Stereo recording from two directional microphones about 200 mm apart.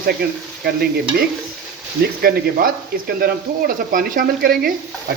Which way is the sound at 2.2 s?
45° right (ahead or behind).